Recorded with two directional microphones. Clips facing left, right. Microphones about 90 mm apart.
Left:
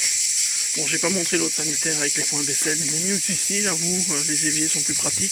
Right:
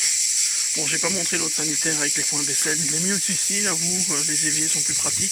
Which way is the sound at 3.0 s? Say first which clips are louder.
Even; 40° right (ahead or behind).